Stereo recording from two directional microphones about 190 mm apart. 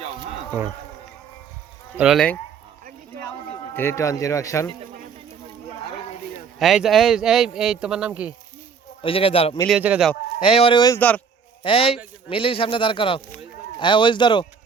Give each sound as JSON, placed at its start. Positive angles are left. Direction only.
{"t": 2.0, "sound": "speech", "side_deg": 0}
{"t": 3.8, "sound": "speech", "side_deg": 15}
{"t": 6.6, "sound": "speech", "side_deg": 0}
{"t": 9.0, "sound": "speech", "side_deg": 30}
{"t": 9.6, "sound": "speech", "side_deg": -5}
{"t": 10.4, "sound": "speech", "side_deg": 30}